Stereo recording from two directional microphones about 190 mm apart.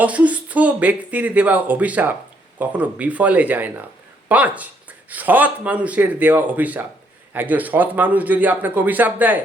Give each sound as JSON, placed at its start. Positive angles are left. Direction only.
{"t": 0.0, "sound": "speech", "side_deg": -5}